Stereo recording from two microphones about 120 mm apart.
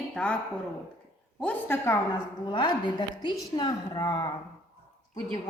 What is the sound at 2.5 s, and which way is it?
A woman's voice, 40° left (ahead or behind).